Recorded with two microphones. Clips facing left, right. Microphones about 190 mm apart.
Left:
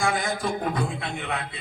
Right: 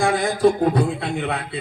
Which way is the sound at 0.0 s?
35° right (ahead or behind).